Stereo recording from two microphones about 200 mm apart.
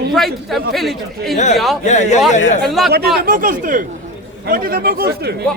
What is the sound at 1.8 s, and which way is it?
Speech, 35° left (ahead or behind).